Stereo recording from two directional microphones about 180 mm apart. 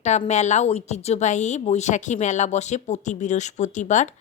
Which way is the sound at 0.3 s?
40° left (ahead or behind).